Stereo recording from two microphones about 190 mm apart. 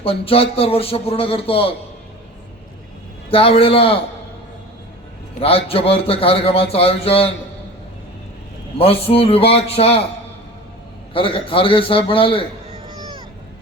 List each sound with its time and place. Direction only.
0.0 s speech: 30° left (ahead or behind)
3.2 s a man's voice: 30° left (ahead or behind)
5.4 s speech: 30° left (ahead or behind)
8.8 s speech: 30° left (ahead or behind)
11.1 s a man's voice: 30° left (ahead or behind)